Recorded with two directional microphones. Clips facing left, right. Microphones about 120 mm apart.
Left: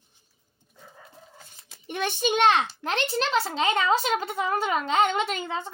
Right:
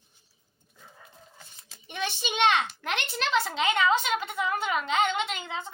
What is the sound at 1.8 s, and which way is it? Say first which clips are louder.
A child's voice: left 6 dB; 50° left (ahead or behind).